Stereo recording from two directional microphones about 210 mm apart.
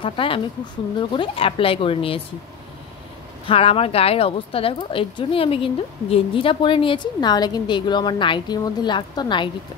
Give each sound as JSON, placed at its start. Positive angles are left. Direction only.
{"t": 0.0, "sound": "a woman's voice", "side_deg": 25}
{"t": 3.4, "sound": "a woman's voice", "side_deg": 25}